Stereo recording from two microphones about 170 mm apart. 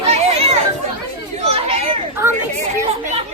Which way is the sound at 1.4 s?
35° right (ahead or behind).